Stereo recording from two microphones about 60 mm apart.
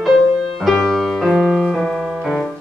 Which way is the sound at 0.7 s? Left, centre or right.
Centre.